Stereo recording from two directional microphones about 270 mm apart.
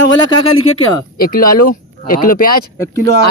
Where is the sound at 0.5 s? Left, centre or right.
Left.